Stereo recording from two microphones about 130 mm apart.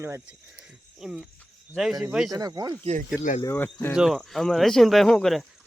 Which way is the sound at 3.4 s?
15° left (ahead or behind).